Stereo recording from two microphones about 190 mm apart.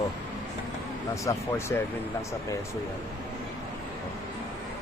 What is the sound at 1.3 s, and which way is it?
Speech, 15° left (ahead or behind).